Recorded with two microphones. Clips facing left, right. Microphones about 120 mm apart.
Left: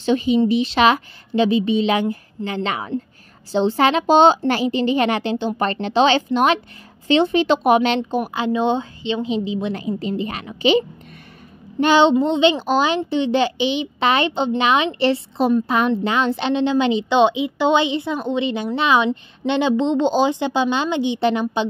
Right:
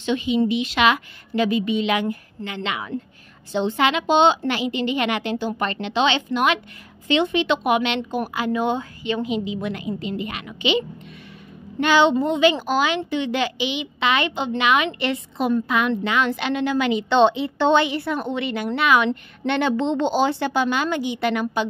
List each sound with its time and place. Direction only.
0.0 s a woman's voice: 40° left (ahead or behind)
8.4 s a woman's voice: 25° left (ahead or behind)
17.1 s a woman's voice: 15° left (ahead or behind)